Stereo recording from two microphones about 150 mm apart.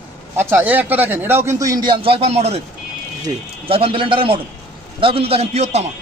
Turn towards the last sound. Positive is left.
turn(degrees=-45)  # may be behind; listen again after turning